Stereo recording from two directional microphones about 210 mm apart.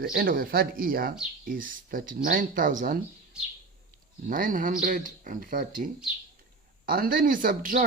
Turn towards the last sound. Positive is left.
turn(degrees=-40)  # may be behind; listen again after turning